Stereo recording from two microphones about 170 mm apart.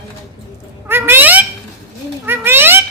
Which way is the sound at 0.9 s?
10° right (ahead or behind).